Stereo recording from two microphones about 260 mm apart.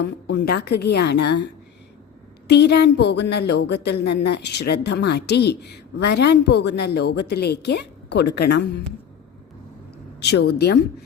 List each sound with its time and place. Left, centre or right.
0.0 s a woman's voice: left
2.5 s a woman's voice: left
10.2 s a woman's voice: left